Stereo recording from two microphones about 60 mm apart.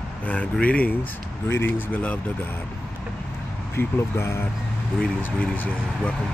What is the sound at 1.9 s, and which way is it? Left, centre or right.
Speech, left.